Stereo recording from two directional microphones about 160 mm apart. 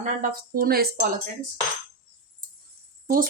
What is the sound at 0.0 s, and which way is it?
A woman's voice, 60° right (ahead or behind).